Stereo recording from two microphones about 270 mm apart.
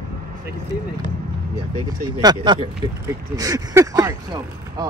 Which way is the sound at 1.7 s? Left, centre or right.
Centre.